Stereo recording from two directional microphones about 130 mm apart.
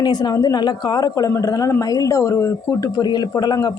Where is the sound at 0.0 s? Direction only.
30° left (ahead or behind).